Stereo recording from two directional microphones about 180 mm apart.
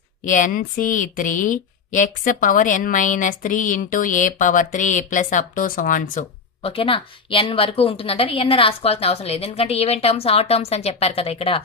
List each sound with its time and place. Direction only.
0.2 s speech: 45° left (ahead or behind)
6.6 s a woman's voice: 30° left (ahead or behind)